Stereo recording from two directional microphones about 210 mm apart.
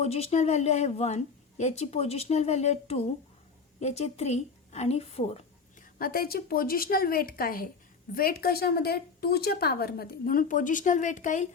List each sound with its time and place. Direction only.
0.0 s a woman's voice: 30° left (ahead or behind)
6.0 s a woman's voice: 45° left (ahead or behind)